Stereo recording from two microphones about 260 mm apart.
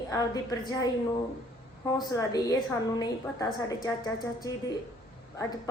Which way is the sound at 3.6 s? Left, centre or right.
Centre.